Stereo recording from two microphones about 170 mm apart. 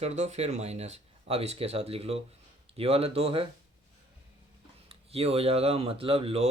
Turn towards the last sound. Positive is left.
turn(degrees=-35)  # may be behind; listen again after turning